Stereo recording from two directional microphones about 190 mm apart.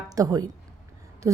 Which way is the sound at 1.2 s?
15° right (ahead or behind).